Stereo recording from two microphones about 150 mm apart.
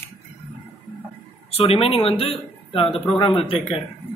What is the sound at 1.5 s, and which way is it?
Speech, 40° left (ahead or behind).